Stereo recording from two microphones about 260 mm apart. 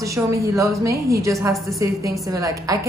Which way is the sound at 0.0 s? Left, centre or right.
Centre.